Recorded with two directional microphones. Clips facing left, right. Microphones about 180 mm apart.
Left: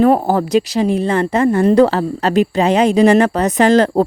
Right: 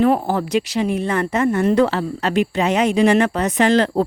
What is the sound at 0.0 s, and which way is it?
A woman's voice, 40° left (ahead or behind).